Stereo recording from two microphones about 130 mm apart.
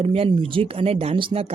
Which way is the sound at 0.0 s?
50° right (ahead or behind).